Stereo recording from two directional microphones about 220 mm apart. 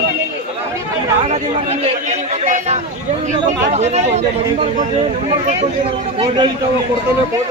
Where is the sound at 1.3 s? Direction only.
30° right (ahead or behind).